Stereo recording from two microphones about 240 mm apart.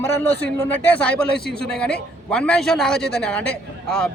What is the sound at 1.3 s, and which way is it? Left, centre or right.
Speech, left.